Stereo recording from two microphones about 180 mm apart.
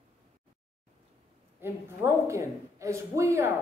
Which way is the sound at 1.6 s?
15° right (ahead or behind).